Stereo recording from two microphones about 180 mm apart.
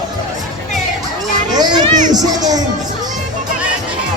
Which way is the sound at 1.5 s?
25° right (ahead or behind).